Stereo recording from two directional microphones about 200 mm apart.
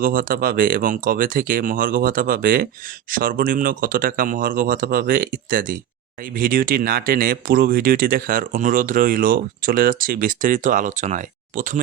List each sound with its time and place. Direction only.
0.0 s speech: 45° right (ahead or behind)